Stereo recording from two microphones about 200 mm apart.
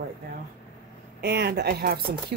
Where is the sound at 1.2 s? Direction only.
55° right (ahead or behind).